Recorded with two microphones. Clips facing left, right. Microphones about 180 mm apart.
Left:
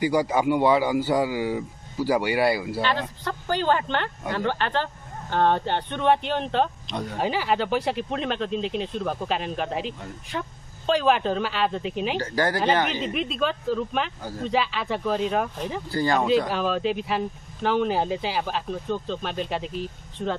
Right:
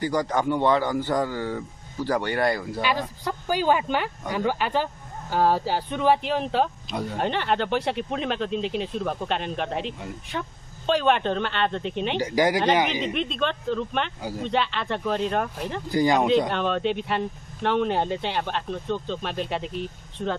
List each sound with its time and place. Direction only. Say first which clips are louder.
0.0 s a man's voice: left 2 dB; 10° left (ahead or behind)
2.8 s speech: even; 10° right (ahead or behind)
12.2 s speech: right 5 dB; 15° right (ahead or behind)
13.0 s speech: even; centre (ahead or behind)
15.9 s speech: right 3 dB; 15° right (ahead or behind)
16.3 s speech: even; 5° left (ahead or behind)